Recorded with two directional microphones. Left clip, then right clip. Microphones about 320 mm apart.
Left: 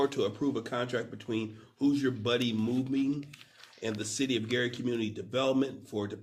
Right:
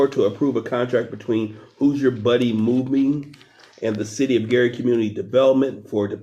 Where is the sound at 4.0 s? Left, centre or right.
Centre.